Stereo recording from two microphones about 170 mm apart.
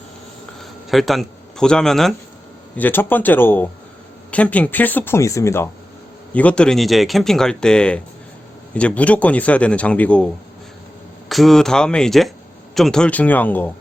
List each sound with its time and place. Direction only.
0.6 s a man's voice: centre (ahead or behind)
11.3 s a man's voice: centre (ahead or behind)